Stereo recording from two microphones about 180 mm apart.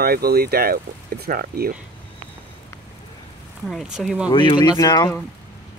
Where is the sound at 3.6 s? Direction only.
Centre (ahead or behind).